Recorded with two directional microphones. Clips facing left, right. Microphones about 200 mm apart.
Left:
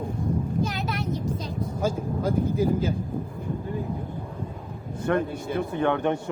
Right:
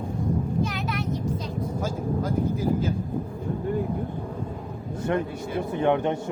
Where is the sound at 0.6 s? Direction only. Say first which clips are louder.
Even; 35° left (ahead or behind).